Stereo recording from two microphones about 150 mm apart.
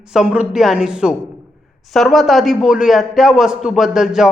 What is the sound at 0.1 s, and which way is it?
A man's voice, 5° right (ahead or behind).